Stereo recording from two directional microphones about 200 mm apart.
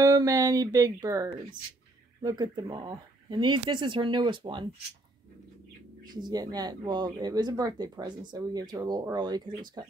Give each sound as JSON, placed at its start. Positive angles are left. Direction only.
{"t": 0.0, "sound": "speech", "side_deg": -20}
{"t": 6.1, "sound": "speech", "side_deg": -20}